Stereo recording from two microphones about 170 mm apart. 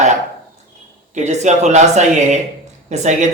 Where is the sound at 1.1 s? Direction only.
45° right (ahead or behind).